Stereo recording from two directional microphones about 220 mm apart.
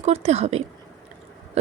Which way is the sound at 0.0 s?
30° right (ahead or behind).